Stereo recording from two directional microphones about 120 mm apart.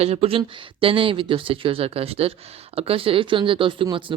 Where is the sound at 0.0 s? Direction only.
60° right (ahead or behind).